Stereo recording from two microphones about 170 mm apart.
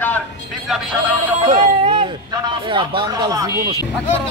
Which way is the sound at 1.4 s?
40° right (ahead or behind).